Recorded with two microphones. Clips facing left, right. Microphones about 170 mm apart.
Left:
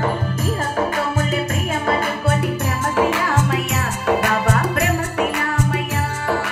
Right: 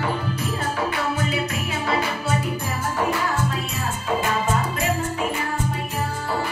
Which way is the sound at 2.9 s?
90° left.